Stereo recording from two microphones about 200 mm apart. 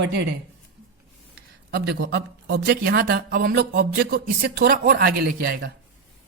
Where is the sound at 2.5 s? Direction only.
50° right (ahead or behind).